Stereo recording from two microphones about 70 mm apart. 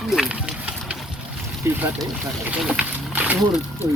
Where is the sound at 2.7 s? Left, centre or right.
Centre.